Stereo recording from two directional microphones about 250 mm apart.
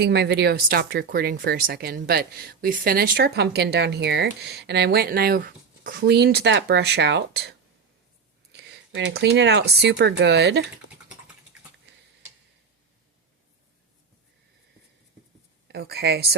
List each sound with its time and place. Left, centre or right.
0.0 s speech: right
8.5 s speech: right
15.6 s speech: right